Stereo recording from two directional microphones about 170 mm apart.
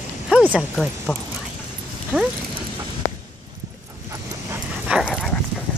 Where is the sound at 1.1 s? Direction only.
10° left (ahead or behind).